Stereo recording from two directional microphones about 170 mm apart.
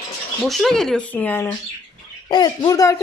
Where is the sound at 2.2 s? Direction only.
25° left (ahead or behind).